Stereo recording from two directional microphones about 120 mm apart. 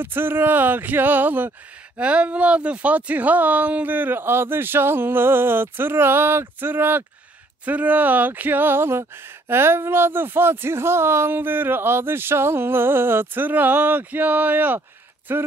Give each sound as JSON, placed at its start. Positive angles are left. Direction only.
{"t": 0.0, "sound": "speech", "side_deg": -15}